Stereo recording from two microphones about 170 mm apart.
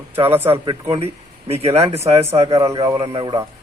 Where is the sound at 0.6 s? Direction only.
35° right (ahead or behind).